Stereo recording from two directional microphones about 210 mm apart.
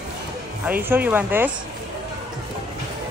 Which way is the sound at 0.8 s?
10° right (ahead or behind).